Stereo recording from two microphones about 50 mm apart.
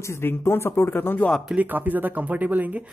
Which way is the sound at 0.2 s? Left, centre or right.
Left.